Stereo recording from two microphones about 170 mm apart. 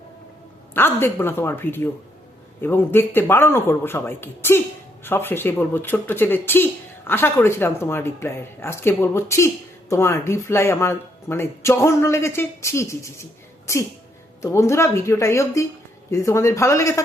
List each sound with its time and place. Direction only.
0.7 s speech: 15° left (ahead or behind)